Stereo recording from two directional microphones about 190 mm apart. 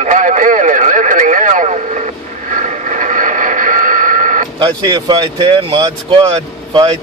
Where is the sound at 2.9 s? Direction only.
45° right (ahead or behind).